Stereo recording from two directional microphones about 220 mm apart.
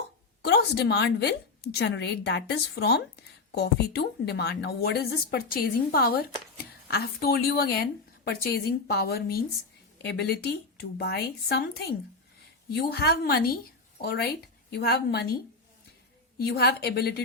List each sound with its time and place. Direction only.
0.4 s a woman's voice: 50° left (ahead or behind)
14.7 s a woman's voice: 45° left (ahead or behind)
16.4 s a woman's voice: 45° left (ahead or behind)